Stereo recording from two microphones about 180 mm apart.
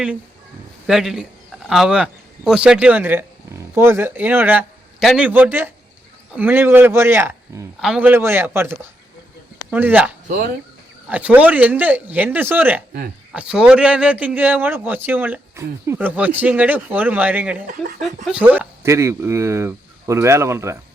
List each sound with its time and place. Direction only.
0.9 s a man's voice: centre (ahead or behind)
10.2 s speech: 50° right (ahead or behind)
11.1 s a man's voice: 10° right (ahead or behind)